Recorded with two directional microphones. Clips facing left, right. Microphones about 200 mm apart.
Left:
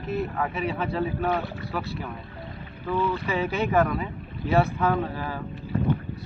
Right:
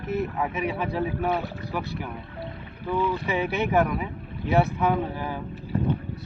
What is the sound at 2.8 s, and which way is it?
Speech, 15° right (ahead or behind).